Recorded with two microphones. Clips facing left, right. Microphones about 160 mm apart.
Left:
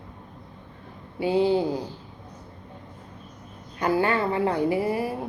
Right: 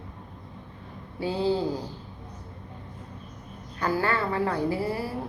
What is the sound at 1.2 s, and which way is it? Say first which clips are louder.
Speech: left 4 dB; 15° left (ahead or behind).